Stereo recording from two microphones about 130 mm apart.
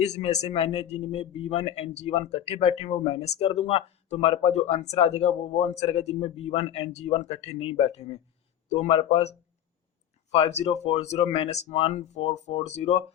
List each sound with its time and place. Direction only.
0.0 s speech: 60° left (ahead or behind)
10.3 s speech: 50° left (ahead or behind)
12.3 s speech: 60° left (ahead or behind)